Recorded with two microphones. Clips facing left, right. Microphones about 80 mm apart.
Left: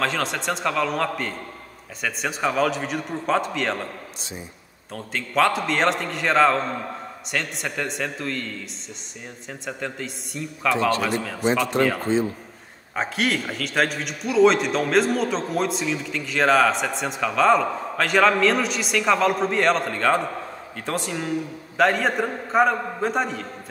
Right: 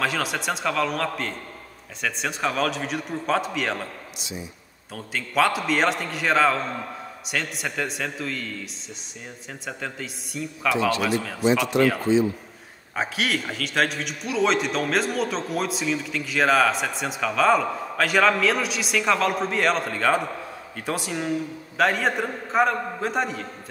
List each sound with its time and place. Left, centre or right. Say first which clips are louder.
0.0 s a man's voice: left 1 dB; centre
4.2 s speech: right 1 dB; left
4.9 s a man's voice: left 1 dB; centre
9.5 s a man's voice: left 2 dB; centre
12.0 s a man's voice: right 2 dB; left
12.9 s a man's voice: left 2 dB; centre